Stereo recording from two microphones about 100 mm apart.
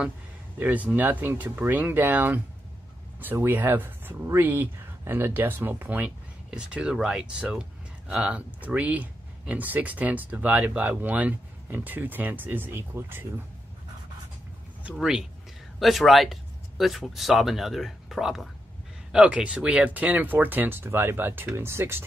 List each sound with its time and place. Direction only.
0.6 s speech: 15° right (ahead or behind)
15.0 s speech: 5° right (ahead or behind); by 22.0 s 25° right (ahead or behind)